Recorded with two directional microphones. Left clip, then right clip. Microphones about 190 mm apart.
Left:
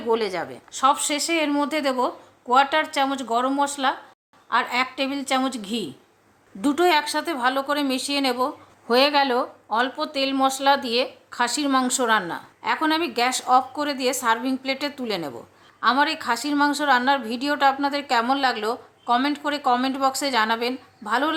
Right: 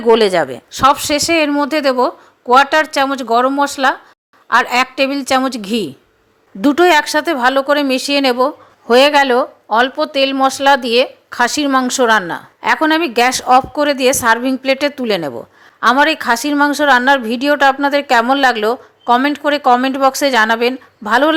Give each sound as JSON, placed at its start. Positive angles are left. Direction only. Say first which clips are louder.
{"t": 0.1, "sound": "a woman's voice", "louder": "right 13 dB", "side_deg": -35}